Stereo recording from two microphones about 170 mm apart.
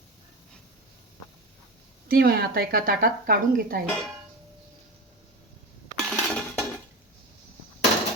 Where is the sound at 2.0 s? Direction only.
65° right (ahead or behind).